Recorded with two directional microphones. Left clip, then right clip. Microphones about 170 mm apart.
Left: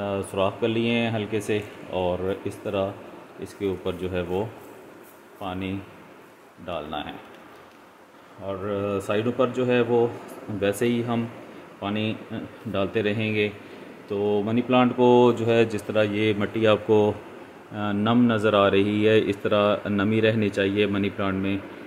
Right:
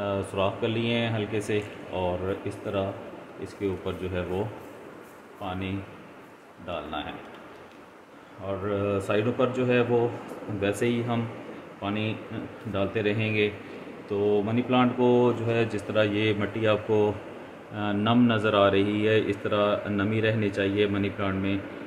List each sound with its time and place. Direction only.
0.0 s speech: 50° left (ahead or behind)
5.4 s speech: 55° left (ahead or behind)
8.5 s speech: 55° left (ahead or behind)
17.7 s speech: 45° left (ahead or behind)